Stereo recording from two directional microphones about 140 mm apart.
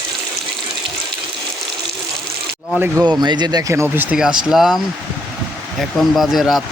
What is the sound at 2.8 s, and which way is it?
Speech, 10° right (ahead or behind).